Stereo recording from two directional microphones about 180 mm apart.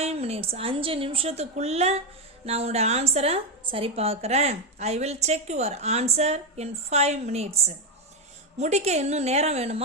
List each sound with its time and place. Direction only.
0.0 s a woman's voice: 35° right (ahead or behind)